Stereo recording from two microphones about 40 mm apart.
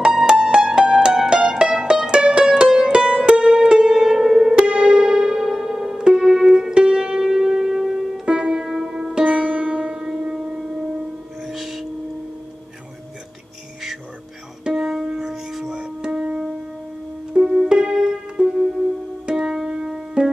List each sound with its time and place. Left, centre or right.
0.0 s music: centre; by 3.6 s right
3.6 s music: centre
4.6 s music: right
8.6 s music: centre
8.9 s sitar: right
10.5 s music: right
11.4 s music: centre
14.6 s music: centre